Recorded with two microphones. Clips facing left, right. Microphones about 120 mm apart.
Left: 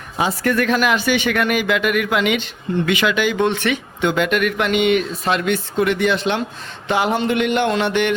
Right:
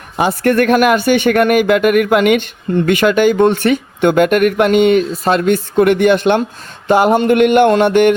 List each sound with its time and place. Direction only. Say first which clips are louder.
0.2 s speech: right 6 dB; 55° right (ahead or behind)